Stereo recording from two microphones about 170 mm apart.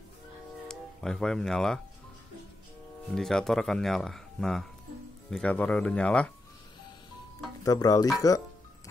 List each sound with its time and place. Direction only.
0.7 s speech: 5° left (ahead or behind)
3.1 s speech: 5° left (ahead or behind)
7.6 s speech: 20° left (ahead or behind)